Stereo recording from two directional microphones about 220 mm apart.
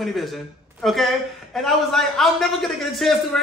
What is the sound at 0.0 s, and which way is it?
Speech, centre (ahead or behind).